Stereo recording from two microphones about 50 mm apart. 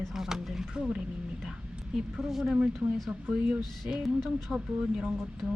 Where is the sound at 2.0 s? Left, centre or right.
Centre.